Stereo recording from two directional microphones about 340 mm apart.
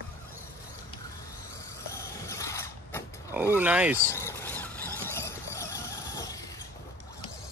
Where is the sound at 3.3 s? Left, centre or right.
Centre.